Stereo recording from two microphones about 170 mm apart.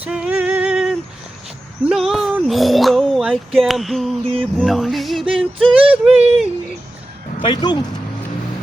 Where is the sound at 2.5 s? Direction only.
Centre (ahead or behind).